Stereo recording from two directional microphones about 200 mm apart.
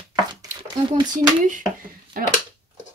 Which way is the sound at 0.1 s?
20° right (ahead or behind).